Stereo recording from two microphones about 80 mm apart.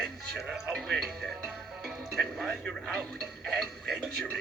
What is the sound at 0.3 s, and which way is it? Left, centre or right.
Music, centre.